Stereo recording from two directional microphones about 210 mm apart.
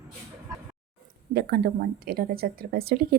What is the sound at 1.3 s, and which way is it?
Speech, 50° right (ahead or behind).